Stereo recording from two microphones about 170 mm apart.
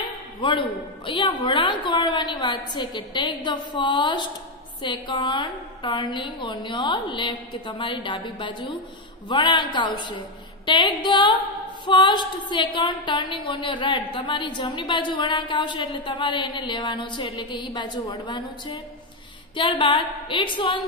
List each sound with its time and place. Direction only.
0.0 s a woman's voice: 30° left (ahead or behind)
19.5 s a woman's voice: 30° left (ahead or behind)